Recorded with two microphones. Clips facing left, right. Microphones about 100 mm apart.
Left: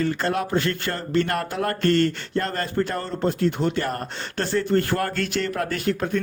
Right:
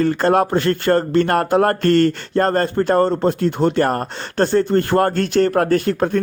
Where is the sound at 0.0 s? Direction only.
45° right (ahead or behind).